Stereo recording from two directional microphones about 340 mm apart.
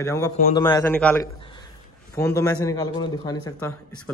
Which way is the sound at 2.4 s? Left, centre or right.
Centre.